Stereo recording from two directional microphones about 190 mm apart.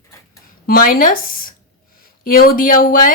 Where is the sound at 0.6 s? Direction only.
50° left (ahead or behind).